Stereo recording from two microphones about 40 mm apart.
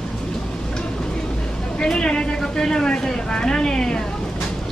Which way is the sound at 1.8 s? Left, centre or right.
Left.